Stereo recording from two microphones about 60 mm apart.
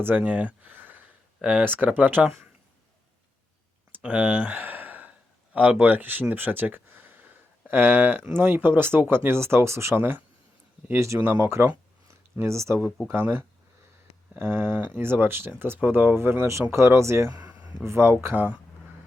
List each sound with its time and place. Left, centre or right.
0.0 s speech: right
4.0 s a sound: right
5.7 s speech: right
10.8 s speech: right
11.2 s speech: right
12.5 s speech: right
14.3 s speech: right
17.3 s a sound: right
17.8 s speech: right
18.3 s speech: right